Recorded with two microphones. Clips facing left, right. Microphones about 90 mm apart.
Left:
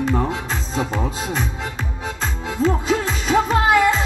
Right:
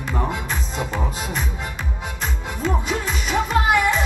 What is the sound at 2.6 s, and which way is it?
Music, 30° left (ahead or behind).